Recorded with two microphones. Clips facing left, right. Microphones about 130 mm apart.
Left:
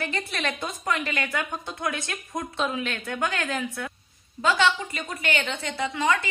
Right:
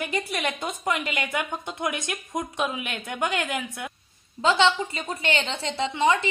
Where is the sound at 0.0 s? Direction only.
15° right (ahead or behind).